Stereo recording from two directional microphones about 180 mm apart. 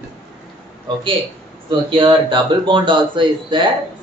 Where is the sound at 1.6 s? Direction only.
25° right (ahead or behind).